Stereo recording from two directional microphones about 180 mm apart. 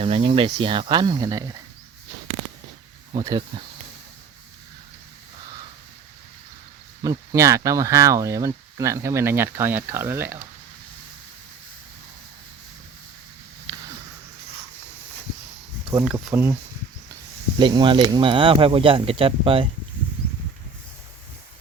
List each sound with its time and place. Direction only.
0.0 s speech: 30° right (ahead or behind)
7.0 s speech: 20° right (ahead or behind)
13.7 s a sound: 25° right (ahead or behind)
16.0 s speech: 10° right (ahead or behind)
17.6 s speech: 25° right (ahead or behind)